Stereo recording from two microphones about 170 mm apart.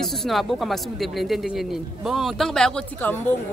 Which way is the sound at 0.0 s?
Centre (ahead or behind).